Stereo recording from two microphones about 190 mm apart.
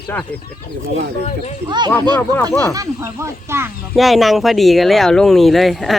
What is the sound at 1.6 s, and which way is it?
Speech, 25° right (ahead or behind).